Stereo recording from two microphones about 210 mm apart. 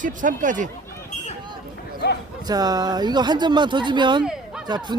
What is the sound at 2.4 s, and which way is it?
Speech, 20° right (ahead or behind).